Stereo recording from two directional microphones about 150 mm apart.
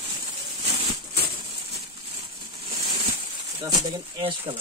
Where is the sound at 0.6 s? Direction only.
40° right (ahead or behind).